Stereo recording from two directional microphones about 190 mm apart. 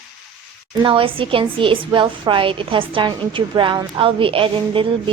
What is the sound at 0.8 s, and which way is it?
A woman's voice, 25° right (ahead or behind).